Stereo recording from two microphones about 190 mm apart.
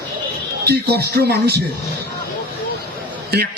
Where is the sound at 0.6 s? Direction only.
55° right (ahead or behind).